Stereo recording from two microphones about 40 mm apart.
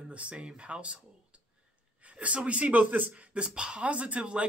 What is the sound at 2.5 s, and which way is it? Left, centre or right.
Speech, right.